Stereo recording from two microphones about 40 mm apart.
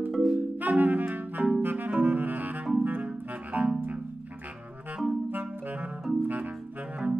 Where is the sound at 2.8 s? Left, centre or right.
Right.